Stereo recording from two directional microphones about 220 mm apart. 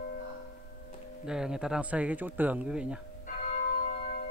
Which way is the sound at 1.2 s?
5° right (ahead or behind).